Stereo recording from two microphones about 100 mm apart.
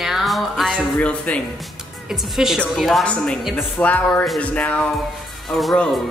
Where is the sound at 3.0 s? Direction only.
10° left (ahead or behind).